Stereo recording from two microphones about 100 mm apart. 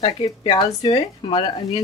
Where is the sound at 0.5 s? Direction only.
45° left (ahead or behind).